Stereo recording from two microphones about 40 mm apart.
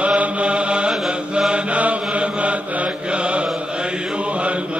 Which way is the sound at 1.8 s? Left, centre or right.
Right.